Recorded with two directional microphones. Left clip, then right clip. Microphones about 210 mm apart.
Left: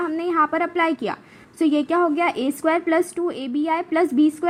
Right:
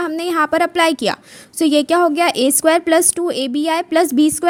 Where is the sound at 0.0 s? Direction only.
50° right (ahead or behind).